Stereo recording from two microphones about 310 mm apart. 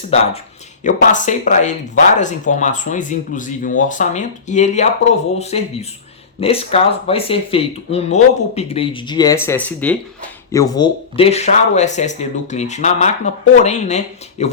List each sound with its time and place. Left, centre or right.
0.9 s speech: left